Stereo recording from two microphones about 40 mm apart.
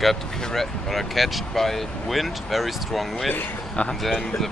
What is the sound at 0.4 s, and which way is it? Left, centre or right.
Speech, centre.